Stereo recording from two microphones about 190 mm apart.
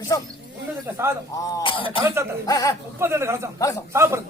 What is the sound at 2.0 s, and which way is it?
Speech, 15° right (ahead or behind).